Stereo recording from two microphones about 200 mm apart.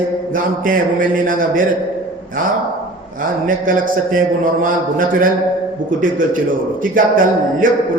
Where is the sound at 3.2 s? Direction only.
45° right (ahead or behind).